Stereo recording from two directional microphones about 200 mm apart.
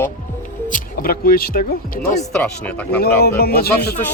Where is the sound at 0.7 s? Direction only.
45° left (ahead or behind).